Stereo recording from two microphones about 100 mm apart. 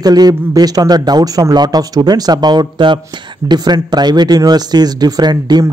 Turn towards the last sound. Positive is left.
turn(degrees=-45)  # may be behind; listen again after turning